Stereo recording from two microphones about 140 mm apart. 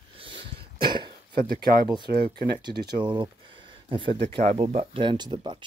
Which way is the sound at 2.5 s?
30° right (ahead or behind).